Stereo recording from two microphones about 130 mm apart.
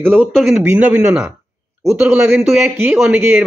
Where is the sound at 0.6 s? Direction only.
15° right (ahead or behind).